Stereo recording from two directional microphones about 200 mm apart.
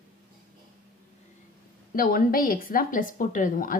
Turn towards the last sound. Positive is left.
turn(degrees=45)  # may be behind; listen again after turning